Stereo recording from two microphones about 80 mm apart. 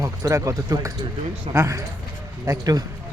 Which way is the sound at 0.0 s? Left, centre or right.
Right.